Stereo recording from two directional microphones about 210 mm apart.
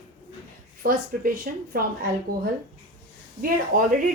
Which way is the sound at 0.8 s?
45° right (ahead or behind).